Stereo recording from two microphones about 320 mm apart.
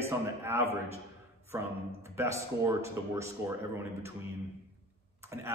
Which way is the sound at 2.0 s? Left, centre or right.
Centre.